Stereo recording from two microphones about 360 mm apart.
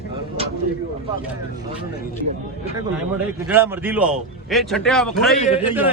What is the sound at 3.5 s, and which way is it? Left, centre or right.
A man's voice, centre.